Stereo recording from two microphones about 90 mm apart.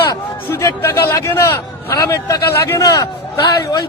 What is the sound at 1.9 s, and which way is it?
A man's voice, 35° left (ahead or behind).